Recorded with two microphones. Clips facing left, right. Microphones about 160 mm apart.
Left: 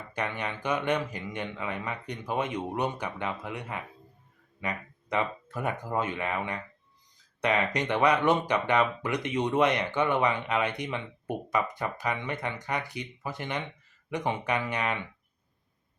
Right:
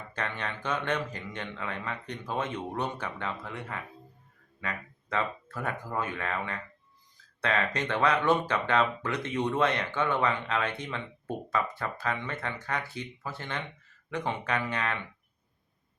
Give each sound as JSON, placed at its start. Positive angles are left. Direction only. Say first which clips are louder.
{"t": 0.1, "sound": "speech", "louder": "left 3 dB", "side_deg": 15}